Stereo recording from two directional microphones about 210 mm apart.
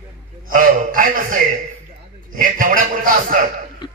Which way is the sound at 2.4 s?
40° right (ahead or behind).